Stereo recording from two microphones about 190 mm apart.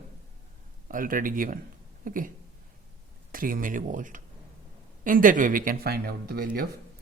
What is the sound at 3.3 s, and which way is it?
Speech, 45° right (ahead or behind).